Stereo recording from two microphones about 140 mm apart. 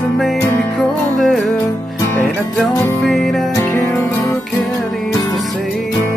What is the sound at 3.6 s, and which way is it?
Music, 15° left (ahead or behind).